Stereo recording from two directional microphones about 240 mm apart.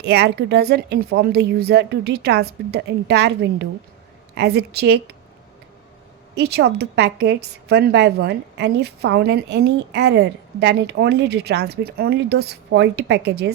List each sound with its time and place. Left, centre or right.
0.0 s a woman's voice: right
6.3 s a woman's voice: right